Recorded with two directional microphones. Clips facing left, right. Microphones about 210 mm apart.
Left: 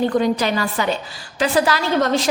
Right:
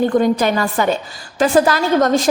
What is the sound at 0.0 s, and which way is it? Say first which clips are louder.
A woman's voice: right 3 dB; 50° right (ahead or behind).